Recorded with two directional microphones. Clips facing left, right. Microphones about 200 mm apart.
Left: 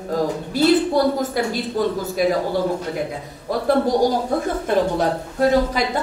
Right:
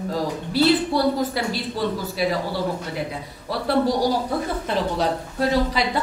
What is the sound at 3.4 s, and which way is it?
A woman's voice, 50° left (ahead or behind).